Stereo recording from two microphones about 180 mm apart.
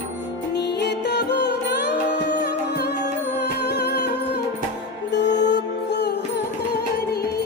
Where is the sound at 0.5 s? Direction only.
70° left (ahead or behind).